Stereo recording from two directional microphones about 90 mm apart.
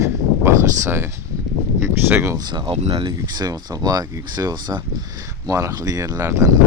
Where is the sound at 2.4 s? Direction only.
50° right (ahead or behind).